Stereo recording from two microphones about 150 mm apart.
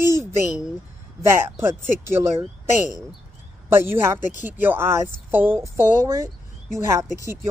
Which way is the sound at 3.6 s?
15° right (ahead or behind).